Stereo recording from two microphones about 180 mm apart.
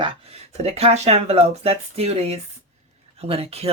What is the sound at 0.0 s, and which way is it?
Speech, 35° right (ahead or behind).